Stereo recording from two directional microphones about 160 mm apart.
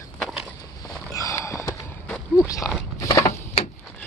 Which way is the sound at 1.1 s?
20° left (ahead or behind).